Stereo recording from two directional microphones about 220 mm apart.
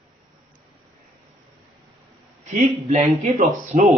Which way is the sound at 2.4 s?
30° right (ahead or behind).